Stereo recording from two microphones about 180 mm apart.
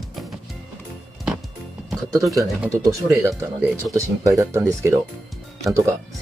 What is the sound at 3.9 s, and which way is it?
Speech, 20° right (ahead or behind).